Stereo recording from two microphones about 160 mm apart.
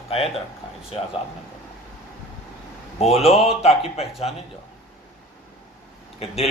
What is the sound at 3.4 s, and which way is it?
Speech, 40° left (ahead or behind).